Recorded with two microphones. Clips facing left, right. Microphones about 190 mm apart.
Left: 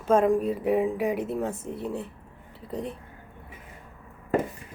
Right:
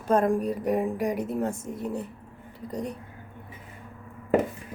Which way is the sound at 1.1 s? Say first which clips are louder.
Even; 40° right (ahead or behind).